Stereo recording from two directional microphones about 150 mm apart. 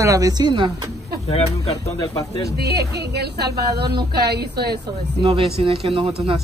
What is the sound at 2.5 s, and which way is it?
Speech, 90° right.